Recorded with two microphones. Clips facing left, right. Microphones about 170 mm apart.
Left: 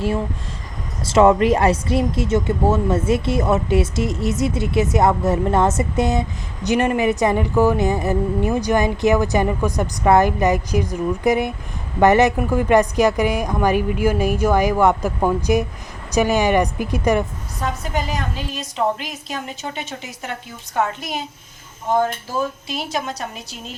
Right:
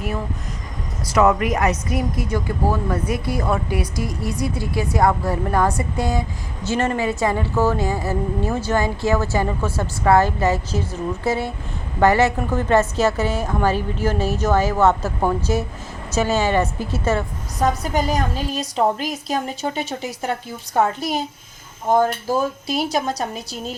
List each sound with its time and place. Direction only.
1.0 s a woman's voice: 25° left (ahead or behind)
17.6 s a woman's voice: 40° right (ahead or behind)